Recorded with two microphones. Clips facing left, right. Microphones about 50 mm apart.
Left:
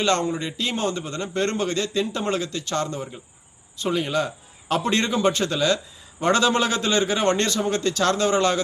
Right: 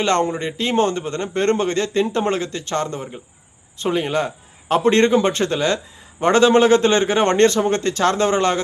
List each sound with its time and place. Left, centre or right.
0.0 s a man's voice: right